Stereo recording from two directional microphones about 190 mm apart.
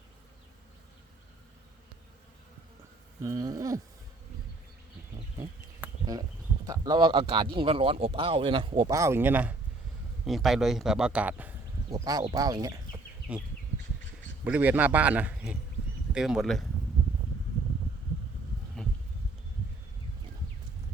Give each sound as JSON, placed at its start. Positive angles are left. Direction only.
{"t": 3.2, "sound": "a man's voice", "side_deg": -20}
{"t": 5.8, "sound": "insect", "side_deg": -20}
{"t": 6.7, "sound": "a man's voice", "side_deg": -20}
{"t": 11.9, "sound": "speech", "side_deg": -20}
{"t": 13.3, "sound": "a man's voice", "side_deg": -10}
{"t": 18.8, "sound": "a sound", "side_deg": 5}